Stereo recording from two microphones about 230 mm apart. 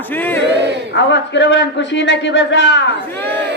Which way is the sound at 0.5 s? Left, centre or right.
Right.